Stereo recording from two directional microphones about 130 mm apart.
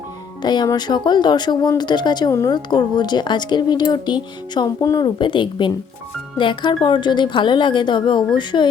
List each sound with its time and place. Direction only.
0.4 s a woman's voice: 30° left (ahead or behind)